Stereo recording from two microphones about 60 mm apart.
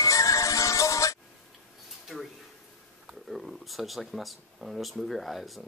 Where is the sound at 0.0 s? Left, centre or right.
Left.